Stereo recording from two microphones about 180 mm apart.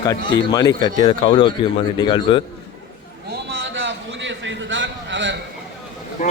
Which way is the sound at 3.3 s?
90° right.